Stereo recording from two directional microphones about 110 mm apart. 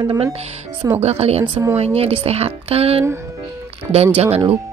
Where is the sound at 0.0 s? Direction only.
45° right (ahead or behind).